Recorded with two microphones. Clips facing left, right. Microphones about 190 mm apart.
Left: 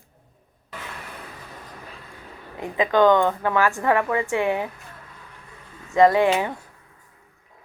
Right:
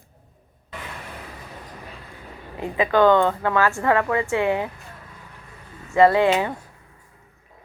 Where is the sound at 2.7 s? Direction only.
15° left (ahead or behind).